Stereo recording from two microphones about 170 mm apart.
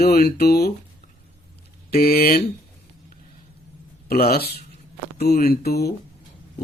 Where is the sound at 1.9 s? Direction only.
65° left (ahead or behind).